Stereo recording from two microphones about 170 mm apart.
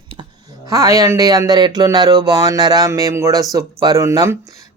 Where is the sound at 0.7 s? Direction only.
20° right (ahead or behind).